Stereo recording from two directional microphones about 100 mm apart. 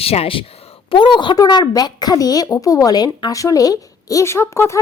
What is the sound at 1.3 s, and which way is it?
A woman's voice, 40° left (ahead or behind).